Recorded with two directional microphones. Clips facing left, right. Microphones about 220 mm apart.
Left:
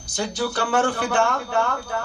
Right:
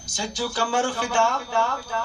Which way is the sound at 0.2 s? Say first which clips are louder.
Left 3 dB; 60° left (ahead or behind).